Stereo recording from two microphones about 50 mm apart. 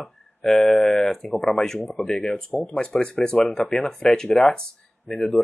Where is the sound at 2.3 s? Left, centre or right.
Centre.